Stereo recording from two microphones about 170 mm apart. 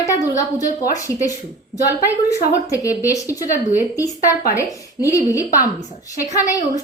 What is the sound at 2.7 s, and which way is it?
Speech, 20° left (ahead or behind).